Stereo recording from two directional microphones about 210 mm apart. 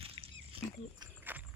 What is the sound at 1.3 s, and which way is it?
Walk, 10° right (ahead or behind).